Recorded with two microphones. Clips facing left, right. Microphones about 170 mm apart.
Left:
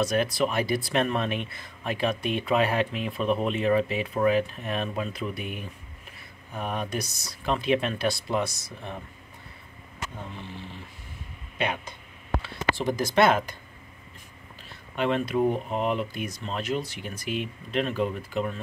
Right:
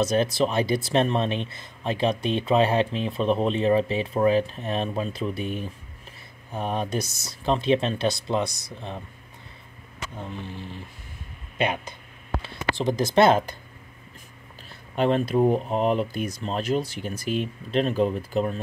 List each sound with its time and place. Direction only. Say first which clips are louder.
0.0 s speech: right 3 dB; 25° right (ahead or behind)
11.5 s speech: right 3 dB; 20° right (ahead or behind)
15.0 s speech: right 4 dB; 35° right (ahead or behind)